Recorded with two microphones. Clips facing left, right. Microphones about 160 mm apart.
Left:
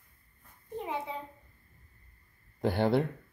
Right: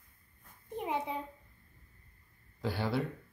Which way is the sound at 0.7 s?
15° right (ahead or behind).